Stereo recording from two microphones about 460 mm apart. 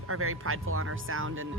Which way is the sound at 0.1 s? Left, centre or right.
Right.